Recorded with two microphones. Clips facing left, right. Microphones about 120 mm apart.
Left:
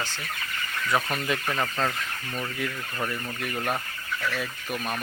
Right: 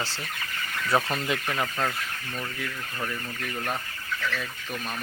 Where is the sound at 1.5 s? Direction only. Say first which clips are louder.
Left 1 dB; 10° right (ahead or behind).